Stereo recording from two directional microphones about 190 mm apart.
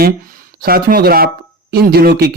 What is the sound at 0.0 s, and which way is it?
Speech, 45° right (ahead or behind).